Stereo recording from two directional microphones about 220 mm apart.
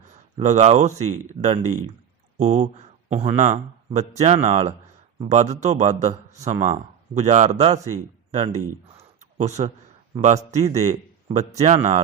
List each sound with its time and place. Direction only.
0.0 s a man's voice: 30° right (ahead or behind)
8.9 s a sound: 30° right (ahead or behind)
10.2 s a man's voice: 30° right (ahead or behind)